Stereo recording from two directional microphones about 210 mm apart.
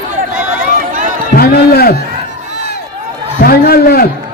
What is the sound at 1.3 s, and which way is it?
Music, 45° left (ahead or behind).